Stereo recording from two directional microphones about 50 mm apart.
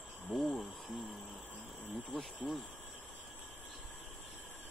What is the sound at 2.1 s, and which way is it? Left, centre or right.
Speech, centre.